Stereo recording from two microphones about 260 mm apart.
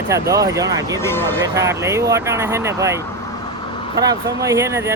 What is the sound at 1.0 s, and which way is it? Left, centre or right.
Speech, centre.